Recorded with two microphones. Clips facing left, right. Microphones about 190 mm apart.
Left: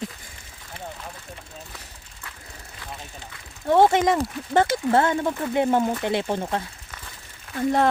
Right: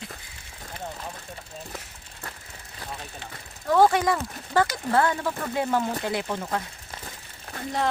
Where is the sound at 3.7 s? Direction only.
25° left (ahead or behind).